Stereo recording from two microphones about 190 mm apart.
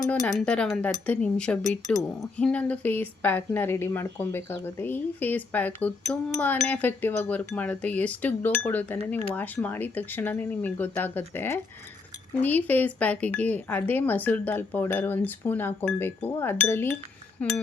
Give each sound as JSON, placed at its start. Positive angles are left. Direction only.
{"t": 0.1, "sound": "speech", "side_deg": 0}